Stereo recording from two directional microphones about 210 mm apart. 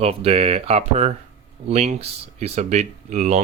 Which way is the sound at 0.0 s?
30° right (ahead or behind).